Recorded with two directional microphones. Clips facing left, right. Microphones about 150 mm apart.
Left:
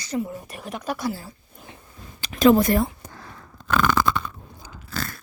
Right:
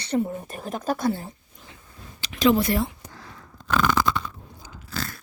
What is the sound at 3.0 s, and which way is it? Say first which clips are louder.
Crunch: left 2 dB; 50° left (ahead or behind).